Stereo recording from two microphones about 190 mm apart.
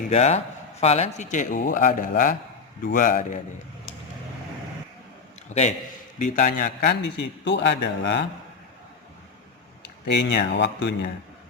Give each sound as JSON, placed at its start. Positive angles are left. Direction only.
{"t": 0.1, "sound": "a man's voice", "side_deg": 35}
{"t": 5.5, "sound": "a man's voice", "side_deg": 40}
{"t": 10.1, "sound": "a man's voice", "side_deg": 60}